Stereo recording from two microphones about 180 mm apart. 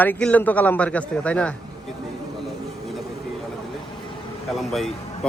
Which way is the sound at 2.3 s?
Centre (ahead or behind).